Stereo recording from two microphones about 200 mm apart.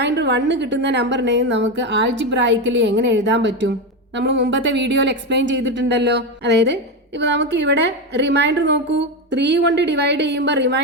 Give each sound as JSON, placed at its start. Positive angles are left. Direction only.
{"t": 0.0, "sound": "speech", "side_deg": -60}